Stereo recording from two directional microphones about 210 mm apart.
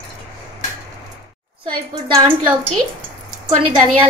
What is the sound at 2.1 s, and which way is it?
Speech, 10° right (ahead or behind).